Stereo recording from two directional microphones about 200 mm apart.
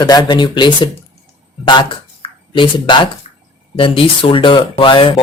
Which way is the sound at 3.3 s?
35° left (ahead or behind).